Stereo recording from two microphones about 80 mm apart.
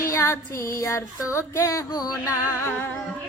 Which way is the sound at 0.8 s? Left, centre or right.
Left.